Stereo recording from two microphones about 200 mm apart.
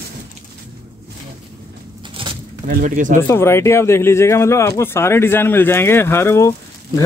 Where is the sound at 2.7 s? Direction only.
40° right (ahead or behind).